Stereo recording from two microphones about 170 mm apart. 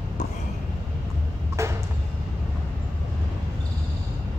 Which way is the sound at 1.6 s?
15° right (ahead or behind).